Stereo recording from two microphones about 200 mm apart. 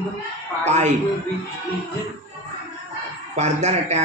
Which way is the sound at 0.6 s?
35° right (ahead or behind).